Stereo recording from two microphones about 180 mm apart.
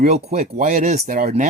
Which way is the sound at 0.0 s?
45° right (ahead or behind).